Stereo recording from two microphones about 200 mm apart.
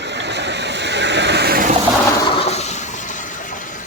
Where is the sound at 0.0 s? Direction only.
60° right (ahead or behind).